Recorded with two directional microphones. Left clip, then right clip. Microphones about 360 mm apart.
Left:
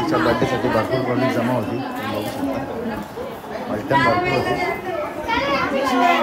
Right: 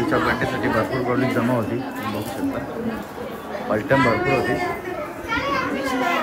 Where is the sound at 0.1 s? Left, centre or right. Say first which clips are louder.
Left 4 dB; centre.